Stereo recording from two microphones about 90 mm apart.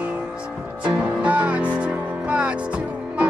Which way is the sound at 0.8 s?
15° right (ahead or behind).